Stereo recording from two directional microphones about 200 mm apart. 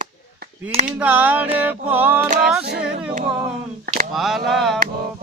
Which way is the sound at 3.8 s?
35° right (ahead or behind).